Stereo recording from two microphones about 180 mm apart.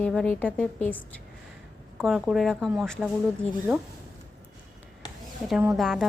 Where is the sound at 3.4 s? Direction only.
35° left (ahead or behind).